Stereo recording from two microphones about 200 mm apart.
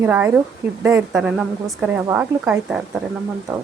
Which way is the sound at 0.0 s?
10° right (ahead or behind).